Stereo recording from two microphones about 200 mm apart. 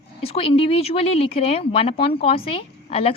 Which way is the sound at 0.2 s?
30° left (ahead or behind).